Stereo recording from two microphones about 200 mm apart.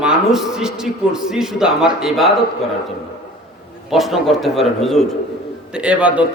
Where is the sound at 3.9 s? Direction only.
Centre (ahead or behind).